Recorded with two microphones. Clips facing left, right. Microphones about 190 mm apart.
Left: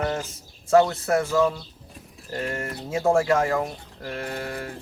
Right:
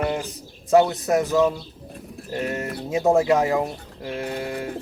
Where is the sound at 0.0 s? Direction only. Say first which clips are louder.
Right 2 dB; 15° right (ahead or behind).